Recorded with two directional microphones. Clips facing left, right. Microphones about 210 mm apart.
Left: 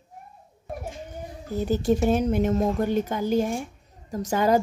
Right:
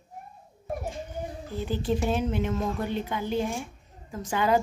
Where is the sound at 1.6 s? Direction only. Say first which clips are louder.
Left 6 dB; 45° left (ahead or behind).